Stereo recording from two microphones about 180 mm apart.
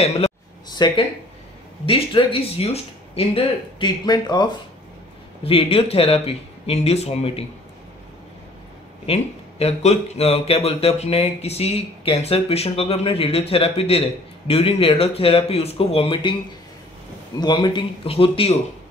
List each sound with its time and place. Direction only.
0.7 s a sound: 25° left (ahead or behind)
1.9 s a man's voice: 30° left (ahead or behind)
9.0 s a man's voice: 35° left (ahead or behind)
17.4 s speech: 25° left (ahead or behind)